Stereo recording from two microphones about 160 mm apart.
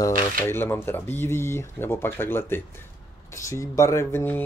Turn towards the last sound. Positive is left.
turn(degrees=15)  # may be behind; listen again after turning